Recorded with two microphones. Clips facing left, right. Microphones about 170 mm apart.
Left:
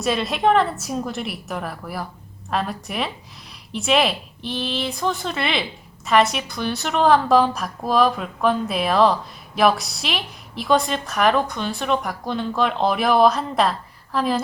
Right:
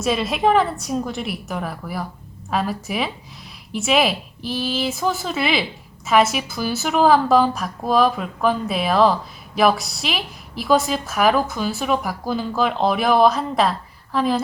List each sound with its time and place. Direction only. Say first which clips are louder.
0.0 s a woman's voice: right 1 dB; centre (ahead or behind)